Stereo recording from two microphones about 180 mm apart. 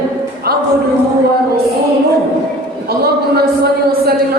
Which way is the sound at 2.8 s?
60° right (ahead or behind).